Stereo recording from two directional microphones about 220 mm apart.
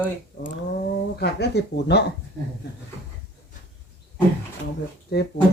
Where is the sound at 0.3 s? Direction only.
40° left (ahead or behind).